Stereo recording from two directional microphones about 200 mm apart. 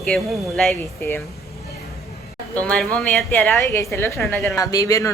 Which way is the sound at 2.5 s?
5° left (ahead or behind).